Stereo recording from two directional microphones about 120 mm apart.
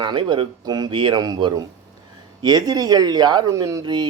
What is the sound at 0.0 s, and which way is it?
Speech, 40° right (ahead or behind).